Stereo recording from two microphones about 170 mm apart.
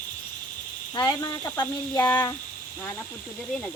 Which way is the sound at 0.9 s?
25° left (ahead or behind).